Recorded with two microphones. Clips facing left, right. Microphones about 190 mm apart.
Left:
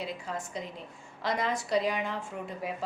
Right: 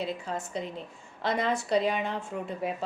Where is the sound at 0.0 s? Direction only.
30° right (ahead or behind).